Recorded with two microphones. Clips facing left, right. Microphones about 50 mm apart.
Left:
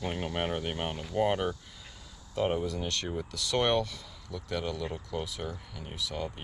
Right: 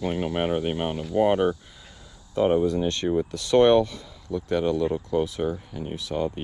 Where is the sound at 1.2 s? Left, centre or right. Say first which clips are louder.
Right 7 dB; right.